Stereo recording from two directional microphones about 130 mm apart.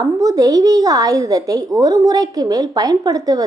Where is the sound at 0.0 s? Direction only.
25° right (ahead or behind).